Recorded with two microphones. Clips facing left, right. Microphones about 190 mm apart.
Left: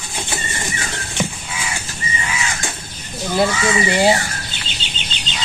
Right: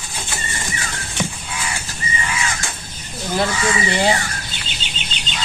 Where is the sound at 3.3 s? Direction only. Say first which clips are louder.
Left 3 dB; 10° left (ahead or behind).